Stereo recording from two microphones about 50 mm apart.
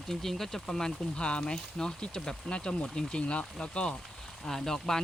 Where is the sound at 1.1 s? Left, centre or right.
Left.